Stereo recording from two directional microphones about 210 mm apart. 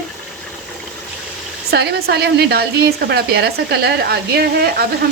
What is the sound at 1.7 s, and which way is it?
Speech, 50° right (ahead or behind).